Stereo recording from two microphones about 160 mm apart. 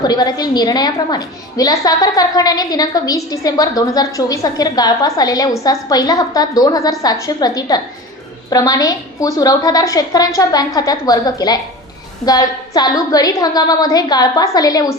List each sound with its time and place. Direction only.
0.0 s a woman's voice: 25° left (ahead or behind)